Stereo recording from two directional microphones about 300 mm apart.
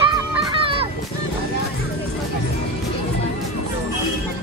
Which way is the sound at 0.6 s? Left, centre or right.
Centre.